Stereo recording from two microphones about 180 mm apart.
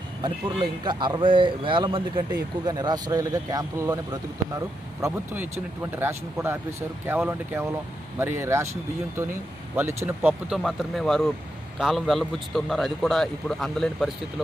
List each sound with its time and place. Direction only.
0.2 s speech: 25° right (ahead or behind)
10.5 s a man's voice: centre (ahead or behind)